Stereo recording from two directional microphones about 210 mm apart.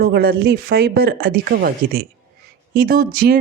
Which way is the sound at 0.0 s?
45° right (ahead or behind).